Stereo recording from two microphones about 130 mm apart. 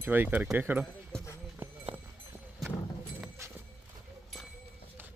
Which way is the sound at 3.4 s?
20° right (ahead or behind).